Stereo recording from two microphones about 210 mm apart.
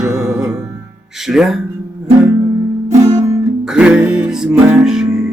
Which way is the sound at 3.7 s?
5° right (ahead or behind).